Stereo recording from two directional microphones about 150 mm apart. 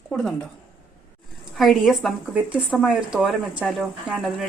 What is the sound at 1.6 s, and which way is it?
Speech, centre (ahead or behind).